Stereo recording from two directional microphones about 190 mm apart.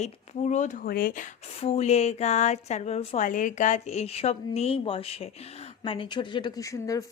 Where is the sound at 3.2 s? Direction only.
45° left (ahead or behind).